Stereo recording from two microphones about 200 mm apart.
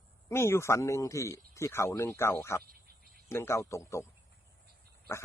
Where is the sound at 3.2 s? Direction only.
15° left (ahead or behind).